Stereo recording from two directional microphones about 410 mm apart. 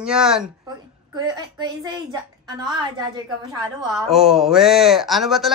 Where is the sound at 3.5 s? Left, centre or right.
Centre.